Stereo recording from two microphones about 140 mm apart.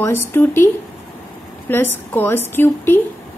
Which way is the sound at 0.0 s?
15° left (ahead or behind).